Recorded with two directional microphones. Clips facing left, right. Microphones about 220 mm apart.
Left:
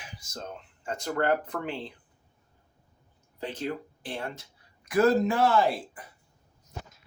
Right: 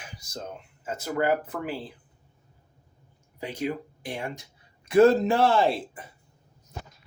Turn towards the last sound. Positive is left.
turn(degrees=-25)  # may be behind; listen again after turning